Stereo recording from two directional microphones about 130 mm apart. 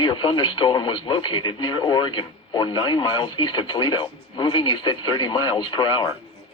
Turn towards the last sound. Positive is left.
turn(degrees=35)  # may be behind; listen again after turning